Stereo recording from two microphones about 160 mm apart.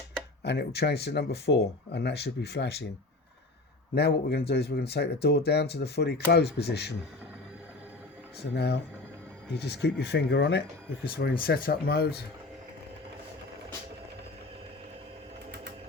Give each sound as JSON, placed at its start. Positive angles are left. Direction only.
{"t": 0.4, "sound": "speech", "side_deg": 90}
{"t": 3.9, "sound": "speech", "side_deg": 90}
{"t": 8.4, "sound": "speech", "side_deg": 90}
{"t": 11.1, "sound": "speech", "side_deg": 75}